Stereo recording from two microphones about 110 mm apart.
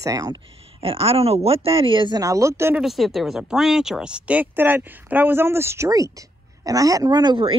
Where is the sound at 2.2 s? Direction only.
30° right (ahead or behind).